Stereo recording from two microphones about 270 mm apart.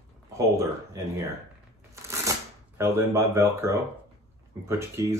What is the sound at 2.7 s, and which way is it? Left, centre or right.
Speech, centre.